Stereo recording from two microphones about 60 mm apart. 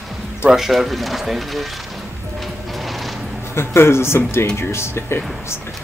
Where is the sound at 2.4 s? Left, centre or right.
Centre.